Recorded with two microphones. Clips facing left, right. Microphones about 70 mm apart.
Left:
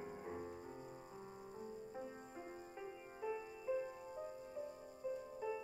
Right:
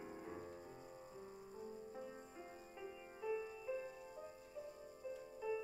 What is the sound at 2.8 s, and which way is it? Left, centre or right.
Music, left.